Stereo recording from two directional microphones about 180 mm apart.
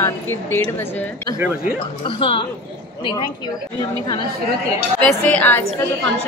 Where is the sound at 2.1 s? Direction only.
30° left (ahead or behind).